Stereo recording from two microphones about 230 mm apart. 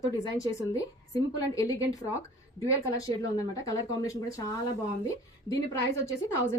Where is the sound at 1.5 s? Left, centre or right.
Centre.